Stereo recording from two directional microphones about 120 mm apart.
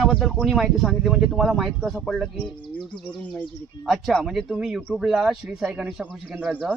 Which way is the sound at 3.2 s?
10° left (ahead or behind).